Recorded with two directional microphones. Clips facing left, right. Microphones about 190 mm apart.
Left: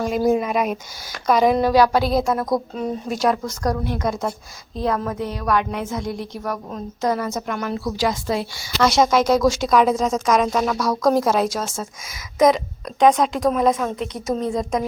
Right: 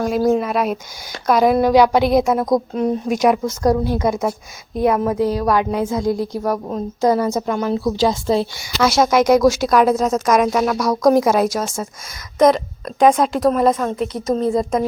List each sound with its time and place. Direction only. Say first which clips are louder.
0.2 s a woman's voice: right 1 dB; 5° left (ahead or behind); by 1.7 s 10° right (ahead or behind)
1.7 s a woman's voice: right 4 dB; 20° right (ahead or behind)
3.6 s a woman's voice: right 6 dB; 25° right (ahead or behind)
4.1 s a woman's voice: right 5 dB; centre (ahead or behind)
4.7 s a woman's voice: right 6 dB; 20° right (ahead or behind)
5.2 s a woman's voice: right 4 dB; 35° right (ahead or behind)
8.8 s speech: right 2 dB; 5° right (ahead or behind)
12.4 s a woman's voice: right 2 dB; centre (ahead or behind)